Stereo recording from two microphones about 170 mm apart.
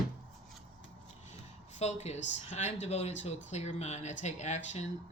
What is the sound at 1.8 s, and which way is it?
Speech, 40° left (ahead or behind).